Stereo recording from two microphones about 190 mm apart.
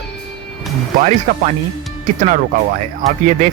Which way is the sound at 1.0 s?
40° right (ahead or behind).